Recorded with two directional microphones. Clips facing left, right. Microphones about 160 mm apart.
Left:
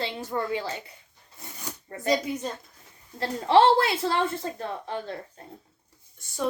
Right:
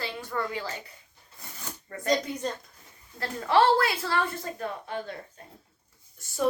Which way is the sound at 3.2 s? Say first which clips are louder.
Left 3 dB; 25° left (ahead or behind).